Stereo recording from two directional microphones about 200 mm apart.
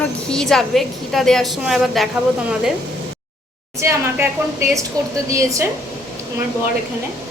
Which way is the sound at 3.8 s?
15° right (ahead or behind).